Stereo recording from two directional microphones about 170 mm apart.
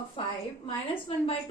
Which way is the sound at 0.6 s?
30° left (ahead or behind).